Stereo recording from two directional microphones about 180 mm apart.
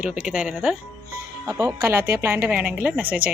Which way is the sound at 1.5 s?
15° right (ahead or behind).